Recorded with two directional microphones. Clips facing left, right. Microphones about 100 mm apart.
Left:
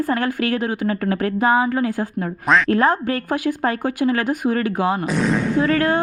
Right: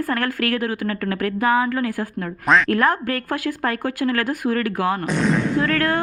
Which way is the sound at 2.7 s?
25° left (ahead or behind).